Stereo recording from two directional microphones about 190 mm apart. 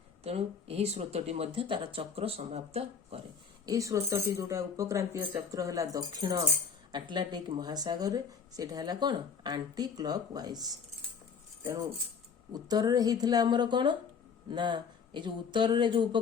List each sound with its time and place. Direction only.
0.3 s speech: 30° right (ahead or behind)
3.7 s speech: 15° right (ahead or behind)